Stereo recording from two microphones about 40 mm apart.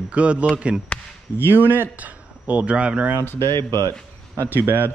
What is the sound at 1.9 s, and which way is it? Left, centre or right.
Speech, right.